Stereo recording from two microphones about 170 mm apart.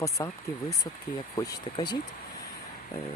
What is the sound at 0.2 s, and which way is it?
Speech, 20° left (ahead or behind).